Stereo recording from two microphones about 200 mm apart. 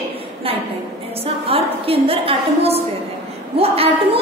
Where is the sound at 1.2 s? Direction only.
30° right (ahead or behind).